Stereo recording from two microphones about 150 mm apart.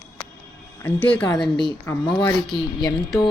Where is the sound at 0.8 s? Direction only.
10° left (ahead or behind).